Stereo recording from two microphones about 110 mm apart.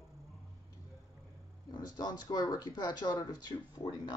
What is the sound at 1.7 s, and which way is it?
A woman's voice, 40° left (ahead or behind).